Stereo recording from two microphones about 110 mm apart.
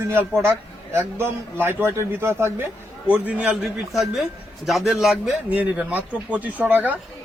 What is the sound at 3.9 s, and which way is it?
A man's voice, centre (ahead or behind).